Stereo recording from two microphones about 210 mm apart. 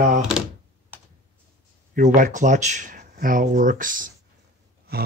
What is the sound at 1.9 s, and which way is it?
Speech, 35° right (ahead or behind).